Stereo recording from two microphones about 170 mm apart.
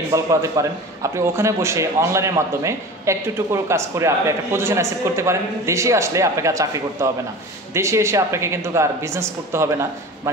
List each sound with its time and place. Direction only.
0.1 s a man's voice: 20° right (ahead or behind)